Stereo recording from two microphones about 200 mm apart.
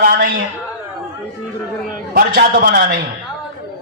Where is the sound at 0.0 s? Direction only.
45° right (ahead or behind).